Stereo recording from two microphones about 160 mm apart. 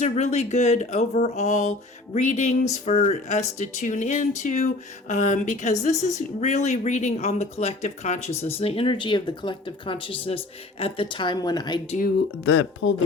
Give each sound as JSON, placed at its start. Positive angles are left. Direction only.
{"t": 0.0, "sound": "speech", "side_deg": 45}